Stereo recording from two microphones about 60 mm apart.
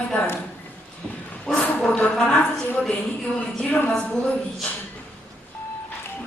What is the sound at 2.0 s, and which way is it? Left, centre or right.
Speech, centre.